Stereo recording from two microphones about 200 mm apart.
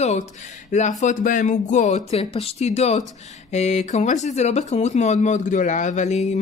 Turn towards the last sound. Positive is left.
turn(degrees=35)  # may be behind; listen again after turning